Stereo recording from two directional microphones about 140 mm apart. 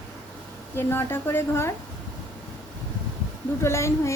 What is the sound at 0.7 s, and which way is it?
Speech, 15° left (ahead or behind).